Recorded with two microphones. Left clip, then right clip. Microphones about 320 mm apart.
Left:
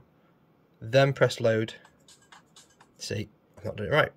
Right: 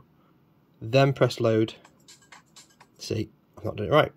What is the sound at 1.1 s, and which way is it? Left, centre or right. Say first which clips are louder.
Speech: right 1 dB; centre.